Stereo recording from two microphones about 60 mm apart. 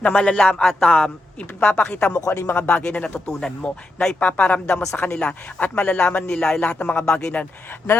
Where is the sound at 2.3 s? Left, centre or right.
Left.